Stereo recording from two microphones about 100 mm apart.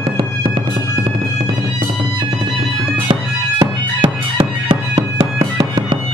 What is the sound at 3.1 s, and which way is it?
Music, 60° right (ahead or behind).